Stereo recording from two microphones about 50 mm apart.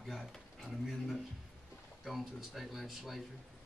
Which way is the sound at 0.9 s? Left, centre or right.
Centre.